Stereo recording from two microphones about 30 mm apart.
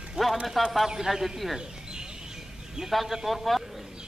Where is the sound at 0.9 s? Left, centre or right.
Centre.